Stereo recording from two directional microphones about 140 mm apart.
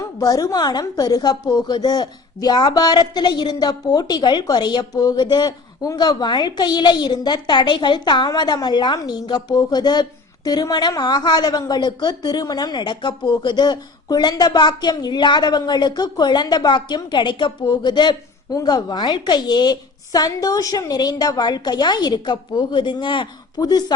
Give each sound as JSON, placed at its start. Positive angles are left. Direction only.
{"t": 0.2, "sound": "a woman's voice", "side_deg": 25}